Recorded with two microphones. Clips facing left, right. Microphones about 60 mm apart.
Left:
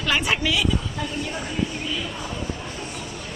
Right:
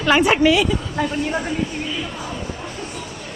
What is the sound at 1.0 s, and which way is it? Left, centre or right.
Speech, right.